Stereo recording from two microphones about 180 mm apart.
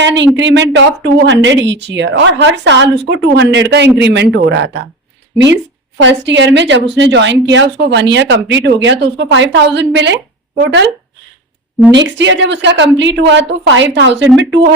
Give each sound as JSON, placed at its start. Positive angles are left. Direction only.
{"t": 0.0, "sound": "a sound", "side_deg": -85}
{"t": 0.3, "sound": "a woman's voice", "side_deg": -80}
{"t": 6.0, "sound": "a woman's voice", "side_deg": -85}
{"t": 11.9, "sound": "speech", "side_deg": -85}